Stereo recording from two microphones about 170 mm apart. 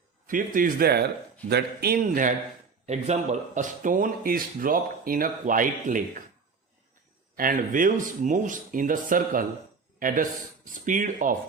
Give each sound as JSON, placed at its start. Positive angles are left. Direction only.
{"t": 0.3, "sound": "speech", "side_deg": -55}
{"t": 2.8, "sound": "speech", "side_deg": -40}
{"t": 7.3, "sound": "speech", "side_deg": -55}
{"t": 10.8, "sound": "speech", "side_deg": -50}